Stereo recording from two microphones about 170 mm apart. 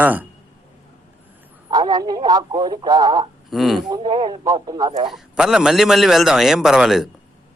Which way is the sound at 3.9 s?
25° right (ahead or behind).